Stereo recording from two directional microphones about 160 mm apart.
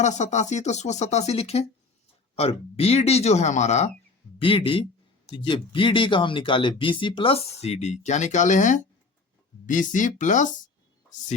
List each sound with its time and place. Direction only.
0.0 s speech: 45° left (ahead or behind)
4.4 s speech: 35° left (ahead or behind); by 10.5 s 50° left (ahead or behind)